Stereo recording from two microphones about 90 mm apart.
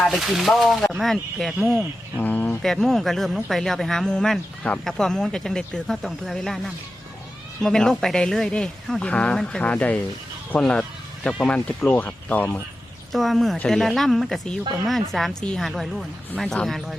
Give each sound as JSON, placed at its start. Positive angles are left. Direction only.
{"t": 0.0, "sound": "speech", "side_deg": 0}
{"t": 2.1, "sound": "a sound", "side_deg": 20}
{"t": 2.6, "sound": "a woman's voice", "side_deg": 5}
{"t": 10.6, "sound": "a sound", "side_deg": 10}
{"t": 11.4, "sound": "a woman's voice", "side_deg": 15}
{"t": 13.1, "sound": "speech", "side_deg": 0}